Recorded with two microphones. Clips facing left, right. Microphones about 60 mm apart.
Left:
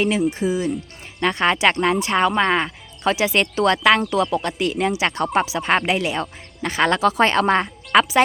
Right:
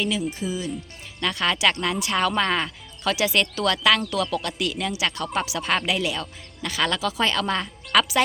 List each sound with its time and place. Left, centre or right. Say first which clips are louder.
0.3 s speech: left 7 dB; left